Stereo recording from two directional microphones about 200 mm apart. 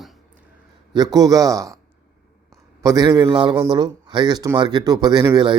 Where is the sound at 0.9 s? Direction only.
20° right (ahead or behind).